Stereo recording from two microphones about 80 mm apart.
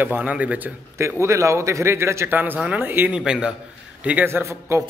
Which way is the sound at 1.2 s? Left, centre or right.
Right.